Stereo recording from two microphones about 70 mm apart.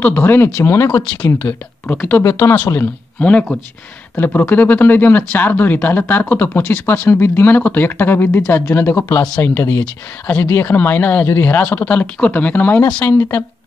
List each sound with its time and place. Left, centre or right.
0.0 s speech: left
0.9 s speech: left
1.4 s speech: left
2.2 s speech: left
3.2 s speech: centre
4.1 s speech: left